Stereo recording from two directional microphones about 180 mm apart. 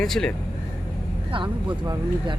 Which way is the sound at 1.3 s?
30° right (ahead or behind).